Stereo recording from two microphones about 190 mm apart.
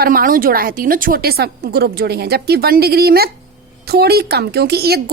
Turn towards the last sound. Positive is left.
turn(degrees=-55)  # may be behind; listen again after turning